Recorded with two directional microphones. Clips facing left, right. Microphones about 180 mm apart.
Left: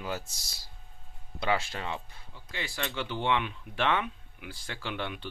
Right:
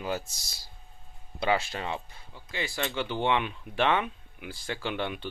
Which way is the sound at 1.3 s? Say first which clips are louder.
Right 2 dB; 20° right (ahead or behind).